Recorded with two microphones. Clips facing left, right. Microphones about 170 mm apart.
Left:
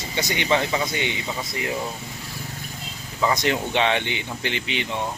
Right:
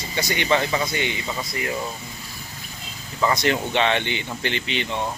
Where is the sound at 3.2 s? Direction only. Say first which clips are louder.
Right 1 dB; 10° left (ahead or behind).